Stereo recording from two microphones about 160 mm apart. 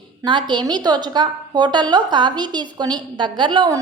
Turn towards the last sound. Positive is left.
turn(degrees=-30)  # may be behind; listen again after turning